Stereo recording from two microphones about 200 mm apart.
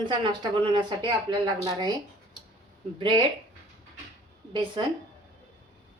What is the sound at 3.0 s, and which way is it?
Speech, 20° right (ahead or behind).